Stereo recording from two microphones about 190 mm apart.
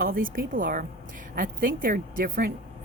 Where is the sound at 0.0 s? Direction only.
50° right (ahead or behind).